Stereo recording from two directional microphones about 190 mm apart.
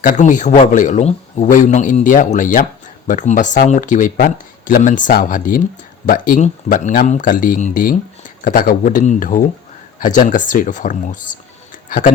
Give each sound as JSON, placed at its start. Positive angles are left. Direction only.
{"t": 0.0, "sound": "a man's voice", "side_deg": 45}